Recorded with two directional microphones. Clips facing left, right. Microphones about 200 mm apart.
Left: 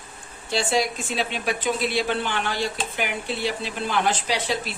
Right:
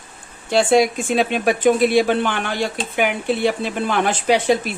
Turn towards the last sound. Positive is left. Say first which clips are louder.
# right 10 dB
turn(degrees=-55)  # may be behind; listen again after turning